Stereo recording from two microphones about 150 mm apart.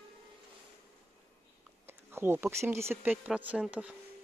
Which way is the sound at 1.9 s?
15° right (ahead or behind).